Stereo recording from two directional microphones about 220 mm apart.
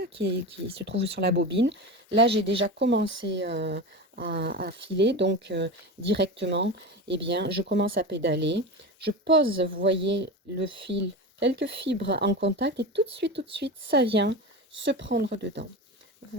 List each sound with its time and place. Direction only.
0.0 s speech: 50° right (ahead or behind)